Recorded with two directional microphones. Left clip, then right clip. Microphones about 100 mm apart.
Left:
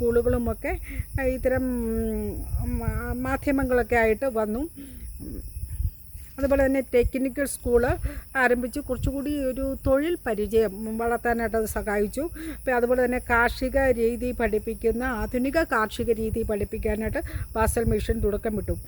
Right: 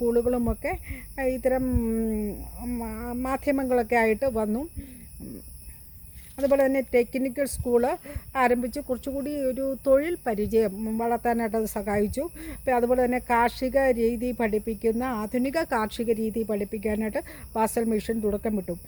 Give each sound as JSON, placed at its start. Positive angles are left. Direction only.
{"t": 0.0, "sound": "speech", "side_deg": 25}
{"t": 6.4, "sound": "speech", "side_deg": 25}